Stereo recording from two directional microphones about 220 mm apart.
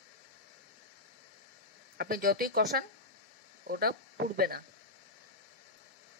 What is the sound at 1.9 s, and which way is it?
Speech, 40° right (ahead or behind).